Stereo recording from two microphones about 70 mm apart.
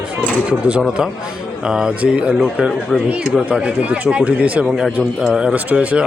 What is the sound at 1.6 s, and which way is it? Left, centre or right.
Speech, centre.